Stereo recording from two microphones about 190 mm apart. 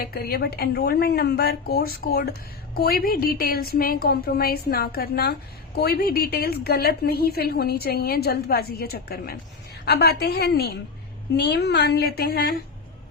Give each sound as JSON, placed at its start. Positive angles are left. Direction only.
{"t": 0.0, "sound": "a woman's voice", "side_deg": 50}